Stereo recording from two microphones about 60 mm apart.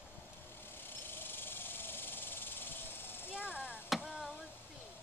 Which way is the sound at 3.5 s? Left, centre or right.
Right.